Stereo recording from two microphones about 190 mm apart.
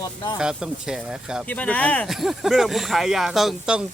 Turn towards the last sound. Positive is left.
turn(degrees=-5)  # may be behind; listen again after turning